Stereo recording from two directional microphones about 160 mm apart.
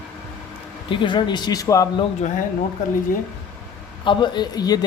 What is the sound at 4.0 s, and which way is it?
Speech, 30° left (ahead or behind).